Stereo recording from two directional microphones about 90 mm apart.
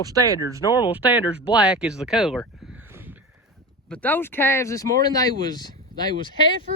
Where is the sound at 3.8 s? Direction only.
15° left (ahead or behind); by 5.6 s 45° left (ahead or behind).